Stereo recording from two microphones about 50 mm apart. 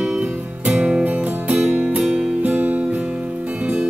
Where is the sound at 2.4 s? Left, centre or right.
Right.